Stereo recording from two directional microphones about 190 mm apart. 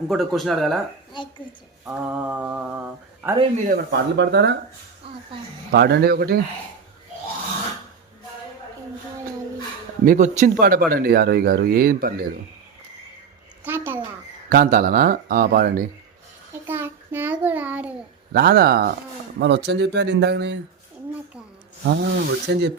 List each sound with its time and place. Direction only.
0.1 s speech: centre (ahead or behind)
1.8 s mantra: 10° right (ahead or behind)
3.7 s speech: 60° right (ahead or behind)
5.7 s speech: 55° right (ahead or behind)
10.1 s speech: 40° right (ahead or behind)
13.7 s a sound: 10° right (ahead or behind)
14.5 s speech: 50° right (ahead or behind)
16.6 s child singing: 10° right (ahead or behind)
18.3 s speech: 55° right (ahead or behind)
19.4 s speech: 65° right (ahead or behind)
21.8 s speech: 65° right (ahead or behind)